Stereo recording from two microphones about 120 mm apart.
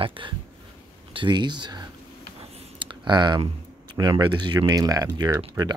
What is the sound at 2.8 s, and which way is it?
Typing, 40° right (ahead or behind).